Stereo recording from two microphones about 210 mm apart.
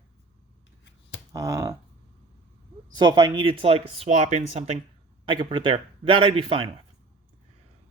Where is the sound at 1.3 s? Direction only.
15° right (ahead or behind).